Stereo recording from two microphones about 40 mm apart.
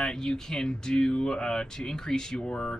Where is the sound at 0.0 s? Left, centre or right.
Centre.